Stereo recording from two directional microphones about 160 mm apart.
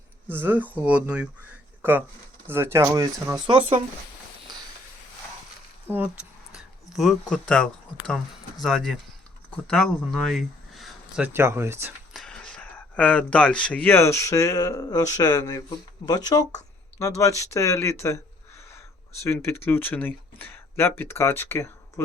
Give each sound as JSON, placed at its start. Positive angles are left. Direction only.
{"t": 0.3, "sound": "speech", "side_deg": -10}
{"t": 3.4, "sound": "speech", "side_deg": -30}
{"t": 5.9, "sound": "speech", "side_deg": 10}
{"t": 6.6, "sound": "speech", "side_deg": 0}
{"t": 12.1, "sound": "speech", "side_deg": 5}